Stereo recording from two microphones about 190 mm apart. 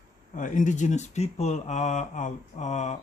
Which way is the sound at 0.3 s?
45° left (ahead or behind).